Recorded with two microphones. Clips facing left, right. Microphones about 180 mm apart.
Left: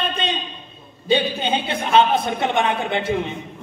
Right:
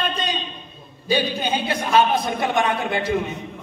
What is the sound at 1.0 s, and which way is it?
Speech, 25° left (ahead or behind).